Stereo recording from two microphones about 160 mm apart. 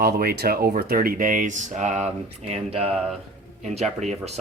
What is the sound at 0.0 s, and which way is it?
Speech, 75° right (ahead or behind).